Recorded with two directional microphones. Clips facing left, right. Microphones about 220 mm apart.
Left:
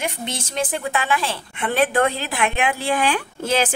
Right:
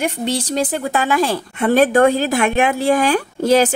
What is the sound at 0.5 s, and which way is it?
Speech, 40° right (ahead or behind).